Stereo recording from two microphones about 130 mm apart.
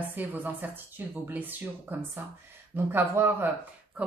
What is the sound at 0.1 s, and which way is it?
A woman's voice, 15° right (ahead or behind).